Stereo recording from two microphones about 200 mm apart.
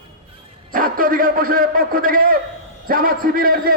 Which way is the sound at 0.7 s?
45° right (ahead or behind).